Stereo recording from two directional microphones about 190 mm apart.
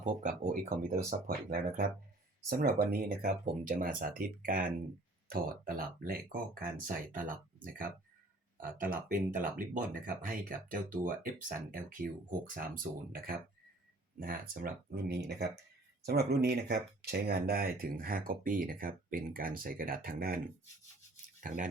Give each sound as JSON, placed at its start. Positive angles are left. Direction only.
{"t": 0.0, "sound": "speech", "side_deg": -40}
{"t": 21.4, "sound": "speech", "side_deg": -45}